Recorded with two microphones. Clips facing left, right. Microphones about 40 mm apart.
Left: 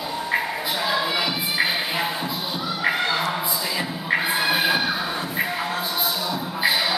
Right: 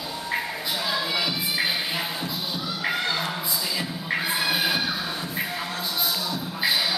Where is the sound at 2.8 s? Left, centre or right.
Centre.